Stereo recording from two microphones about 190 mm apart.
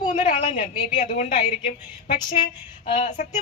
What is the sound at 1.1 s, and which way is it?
Speech, 35° left (ahead or behind).